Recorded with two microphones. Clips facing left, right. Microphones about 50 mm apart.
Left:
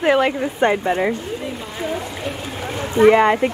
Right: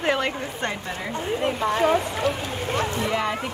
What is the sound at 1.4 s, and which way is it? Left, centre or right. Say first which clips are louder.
Speech: right 6 dB; right.